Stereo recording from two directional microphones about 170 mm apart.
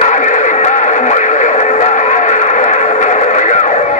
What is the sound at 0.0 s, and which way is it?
Music, 45° left (ahead or behind).